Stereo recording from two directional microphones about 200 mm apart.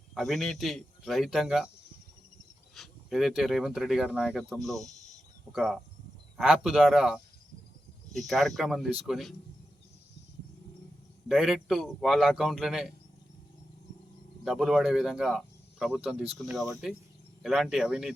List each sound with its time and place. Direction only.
0.1 s speech: centre (ahead or behind)
2.7 s speech: centre (ahead or behind)
4.9 s a sound: 35° left (ahead or behind)
5.5 s speech: centre (ahead or behind)
11.3 s speech: centre (ahead or behind)
14.4 s speech: centre (ahead or behind)